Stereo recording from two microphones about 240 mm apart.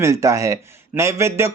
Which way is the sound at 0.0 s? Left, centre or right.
Centre.